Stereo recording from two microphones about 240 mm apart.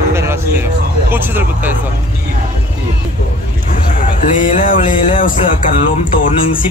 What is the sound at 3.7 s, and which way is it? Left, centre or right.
Speech, left.